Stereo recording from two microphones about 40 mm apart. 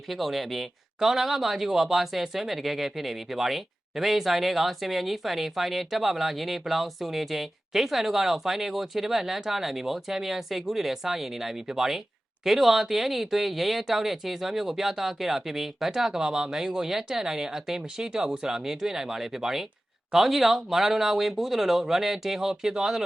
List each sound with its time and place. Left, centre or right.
0.1 s speech: centre